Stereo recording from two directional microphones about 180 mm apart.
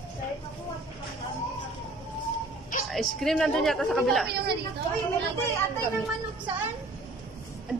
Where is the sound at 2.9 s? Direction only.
Centre (ahead or behind).